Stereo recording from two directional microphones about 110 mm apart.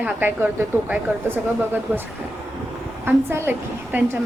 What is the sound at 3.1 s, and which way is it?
Speech, 20° right (ahead or behind).